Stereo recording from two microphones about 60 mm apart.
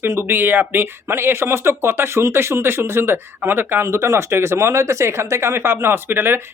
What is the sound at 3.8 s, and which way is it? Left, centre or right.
Speech, right.